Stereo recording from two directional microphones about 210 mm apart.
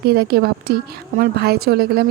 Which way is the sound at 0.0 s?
50° right (ahead or behind).